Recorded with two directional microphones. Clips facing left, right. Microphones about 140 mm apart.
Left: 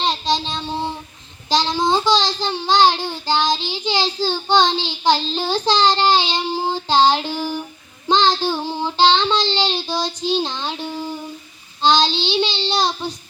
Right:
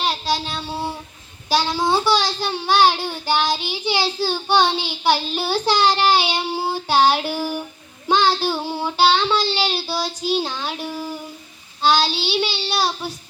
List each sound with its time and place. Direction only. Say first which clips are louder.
0.0 s a sound: left 2 dB; 5° right (ahead or behind)
0.7 s child singing: left 3 dB; 5° right (ahead or behind)
10.8 s humming: left 1 dB; 20° left (ahead or behind)
11.8 s child singing: left 2 dB; 5° right (ahead or behind)